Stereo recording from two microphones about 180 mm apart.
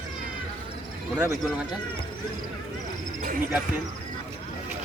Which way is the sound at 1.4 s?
Centre (ahead or behind).